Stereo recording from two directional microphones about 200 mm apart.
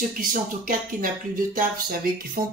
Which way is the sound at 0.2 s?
45° right (ahead or behind).